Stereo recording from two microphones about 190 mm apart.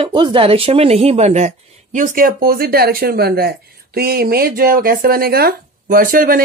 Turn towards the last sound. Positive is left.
turn(degrees=-50)  # may be behind; listen again after turning